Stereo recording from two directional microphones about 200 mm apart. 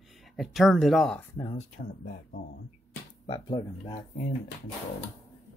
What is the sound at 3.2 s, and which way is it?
Speech, 25° left (ahead or behind).